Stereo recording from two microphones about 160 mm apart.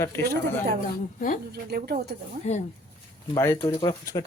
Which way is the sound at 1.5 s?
70° right (ahead or behind).